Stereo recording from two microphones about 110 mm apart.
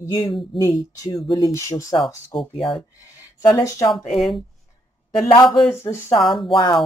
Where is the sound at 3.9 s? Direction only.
Centre (ahead or behind).